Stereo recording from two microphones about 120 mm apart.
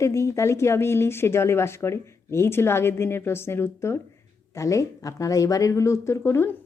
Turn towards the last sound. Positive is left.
turn(degrees=20)  # may be behind; listen again after turning